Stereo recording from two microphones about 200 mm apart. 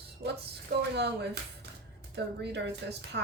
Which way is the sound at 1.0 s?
60° right (ahead or behind).